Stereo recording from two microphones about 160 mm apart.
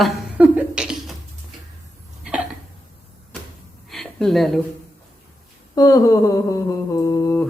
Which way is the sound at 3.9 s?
Centre (ahead or behind).